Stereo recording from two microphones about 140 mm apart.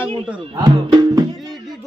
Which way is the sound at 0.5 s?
30° right (ahead or behind).